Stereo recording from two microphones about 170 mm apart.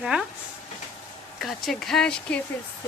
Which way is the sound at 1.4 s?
Centre (ahead or behind).